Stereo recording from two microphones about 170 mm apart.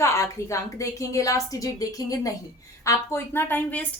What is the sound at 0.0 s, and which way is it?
A woman's voice, 15° left (ahead or behind).